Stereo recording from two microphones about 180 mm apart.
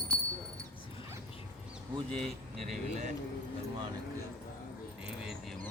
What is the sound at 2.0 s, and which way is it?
Speech, 5° left (ahead or behind).